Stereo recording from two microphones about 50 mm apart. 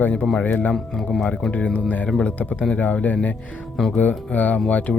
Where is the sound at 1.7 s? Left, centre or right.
Left.